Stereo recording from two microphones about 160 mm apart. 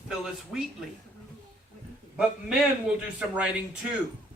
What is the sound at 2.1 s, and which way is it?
A man's voice, 5° right (ahead or behind).